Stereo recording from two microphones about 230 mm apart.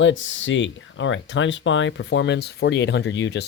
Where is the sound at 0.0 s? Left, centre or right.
Left.